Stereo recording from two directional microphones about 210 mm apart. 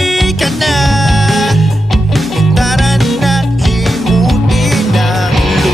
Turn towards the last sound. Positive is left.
turn(degrees=0)  # may be behind; listen again after turning